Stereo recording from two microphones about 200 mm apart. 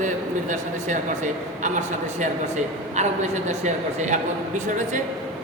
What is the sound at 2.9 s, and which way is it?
Speech, 35° right (ahead or behind).